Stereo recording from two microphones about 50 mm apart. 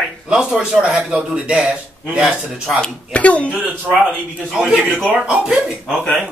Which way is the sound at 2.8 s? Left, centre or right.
Left.